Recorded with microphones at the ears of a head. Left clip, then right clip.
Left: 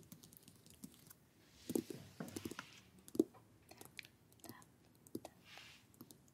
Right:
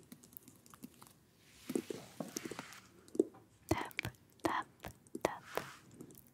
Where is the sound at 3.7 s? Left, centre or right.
Right.